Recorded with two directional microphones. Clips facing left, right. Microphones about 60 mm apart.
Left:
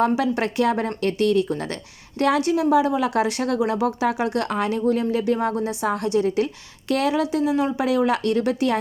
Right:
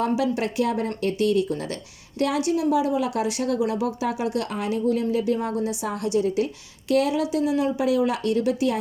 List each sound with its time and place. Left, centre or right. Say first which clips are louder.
0.0 s a woman's voice: left 3 dB; left